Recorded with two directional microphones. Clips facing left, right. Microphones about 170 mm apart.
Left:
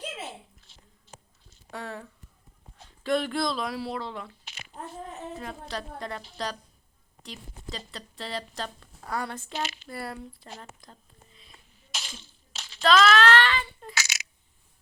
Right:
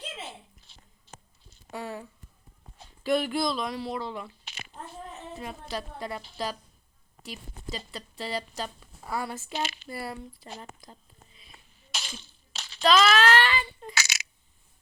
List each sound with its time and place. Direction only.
1.7 s speech: 5° right (ahead or behind)
5.4 s a woman's voice: 5° right (ahead or behind)
11.9 s a sound: 65° right (ahead or behind)
12.8 s child singing: centre (ahead or behind)